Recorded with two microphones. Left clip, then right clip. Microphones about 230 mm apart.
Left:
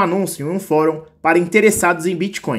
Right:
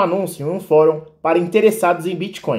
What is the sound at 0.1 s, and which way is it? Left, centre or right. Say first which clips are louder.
Speech: even; left.